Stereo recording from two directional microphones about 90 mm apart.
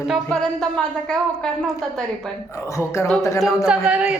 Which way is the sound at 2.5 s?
30° left (ahead or behind).